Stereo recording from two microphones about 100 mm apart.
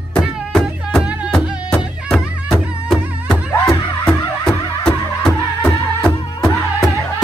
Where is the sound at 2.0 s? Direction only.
Centre (ahead or behind).